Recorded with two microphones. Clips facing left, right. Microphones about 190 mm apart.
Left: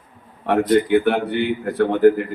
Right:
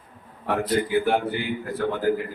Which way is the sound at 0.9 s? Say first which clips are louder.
Left 5 dB; 65° left (ahead or behind).